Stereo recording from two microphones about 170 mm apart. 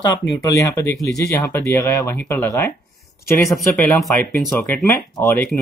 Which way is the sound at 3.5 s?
5° left (ahead or behind).